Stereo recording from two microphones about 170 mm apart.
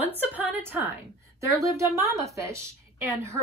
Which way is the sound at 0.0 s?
10° right (ahead or behind).